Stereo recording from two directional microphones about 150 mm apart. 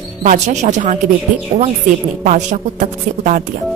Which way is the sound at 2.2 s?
55° right (ahead or behind).